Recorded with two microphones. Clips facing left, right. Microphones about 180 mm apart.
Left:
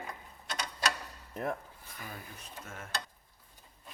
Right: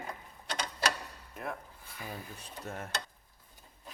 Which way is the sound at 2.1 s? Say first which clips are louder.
Right 3 dB; 35° right (ahead or behind).